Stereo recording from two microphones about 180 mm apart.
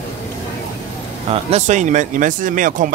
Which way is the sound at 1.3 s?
35° right (ahead or behind).